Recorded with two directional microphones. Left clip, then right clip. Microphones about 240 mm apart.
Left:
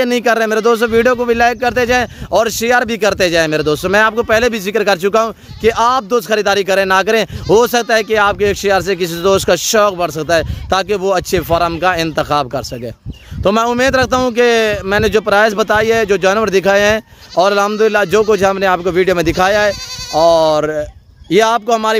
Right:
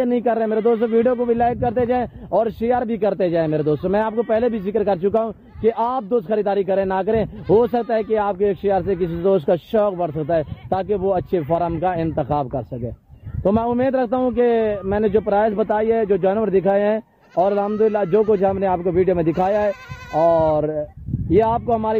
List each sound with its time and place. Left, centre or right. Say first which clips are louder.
0.0 s speech: left 6 dB; centre
20.2 s speech: left 6 dB; left
21.3 s speech: left 6 dB; centre